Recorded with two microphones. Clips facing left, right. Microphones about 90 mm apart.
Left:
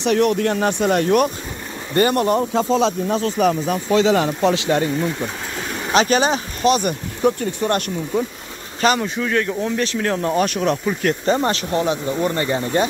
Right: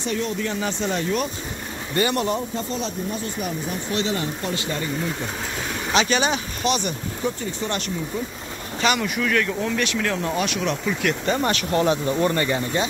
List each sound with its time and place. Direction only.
0.0 s speech: 70° left (ahead or behind)
2.0 s speech: 45° left (ahead or behind)
2.5 s speech: 90° left; by 4.9 s 65° left (ahead or behind)
5.9 s speech: 40° left (ahead or behind)
8.8 s speech: 30° left (ahead or behind)
11.8 s speech: 10° left (ahead or behind)
12.4 s speech: 25° left (ahead or behind)